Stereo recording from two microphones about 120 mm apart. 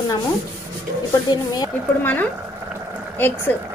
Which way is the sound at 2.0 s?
15° left (ahead or behind).